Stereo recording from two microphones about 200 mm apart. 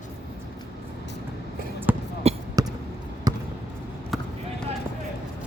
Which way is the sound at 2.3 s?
30° right (ahead or behind).